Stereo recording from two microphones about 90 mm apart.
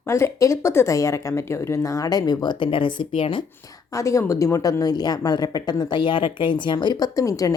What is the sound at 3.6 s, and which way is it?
A woman's voice, 40° left (ahead or behind).